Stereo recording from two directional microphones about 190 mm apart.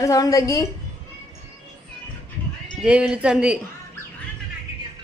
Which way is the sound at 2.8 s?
5° right (ahead or behind).